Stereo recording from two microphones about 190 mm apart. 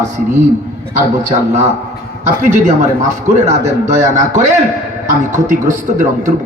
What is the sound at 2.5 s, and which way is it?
Speech, 40° right (ahead or behind).